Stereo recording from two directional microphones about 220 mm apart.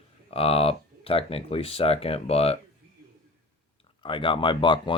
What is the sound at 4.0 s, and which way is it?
Speech, 25° left (ahead or behind).